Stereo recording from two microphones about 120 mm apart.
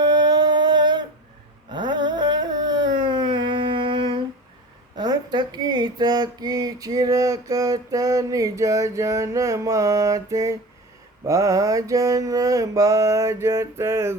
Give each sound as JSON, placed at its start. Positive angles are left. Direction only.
{"t": 0.0, "sound": "humming", "side_deg": -35}
{"t": 1.7, "sound": "a sound", "side_deg": -40}
{"t": 4.9, "sound": "speech", "side_deg": -35}